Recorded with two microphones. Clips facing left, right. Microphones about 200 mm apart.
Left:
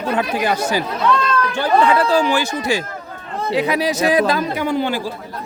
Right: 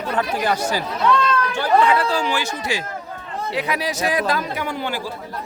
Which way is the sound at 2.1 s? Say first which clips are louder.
Left 6 dB; 50° left (ahead or behind).